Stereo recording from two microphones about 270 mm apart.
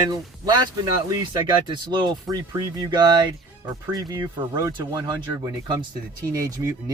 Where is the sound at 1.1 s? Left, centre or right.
Centre.